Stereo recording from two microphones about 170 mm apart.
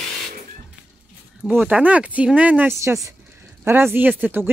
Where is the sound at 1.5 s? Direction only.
5° right (ahead or behind).